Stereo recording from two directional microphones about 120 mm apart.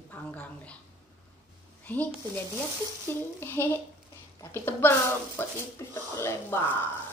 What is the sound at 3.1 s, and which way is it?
Speech, 20° left (ahead or behind).